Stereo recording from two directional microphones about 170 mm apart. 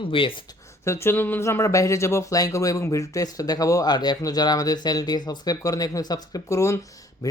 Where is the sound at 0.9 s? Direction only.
15° left (ahead or behind).